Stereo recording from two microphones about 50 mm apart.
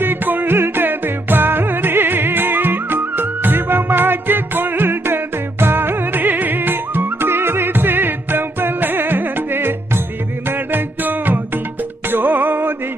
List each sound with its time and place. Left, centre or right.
0.0 s music: right